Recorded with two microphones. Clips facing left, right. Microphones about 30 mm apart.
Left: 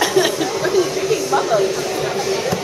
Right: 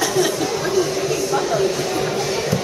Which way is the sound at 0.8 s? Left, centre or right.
Centre.